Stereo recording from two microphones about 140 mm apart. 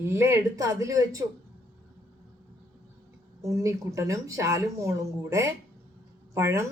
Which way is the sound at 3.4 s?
25° right (ahead or behind).